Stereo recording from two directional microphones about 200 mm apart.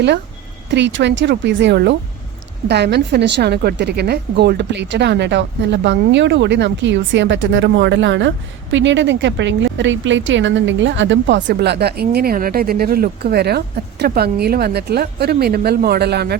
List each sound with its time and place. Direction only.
0.7 s a woman's voice: 60° right (ahead or behind)